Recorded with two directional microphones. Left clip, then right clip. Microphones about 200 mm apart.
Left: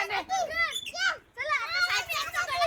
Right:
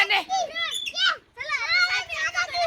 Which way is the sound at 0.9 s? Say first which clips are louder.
Right 6 dB; 40° right (ahead or behind).